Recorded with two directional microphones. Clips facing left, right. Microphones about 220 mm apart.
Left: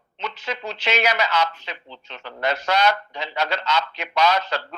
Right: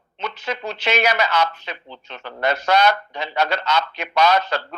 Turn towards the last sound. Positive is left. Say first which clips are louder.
# right 3 dB
turn(degrees=-50)  # may be behind; listen again after turning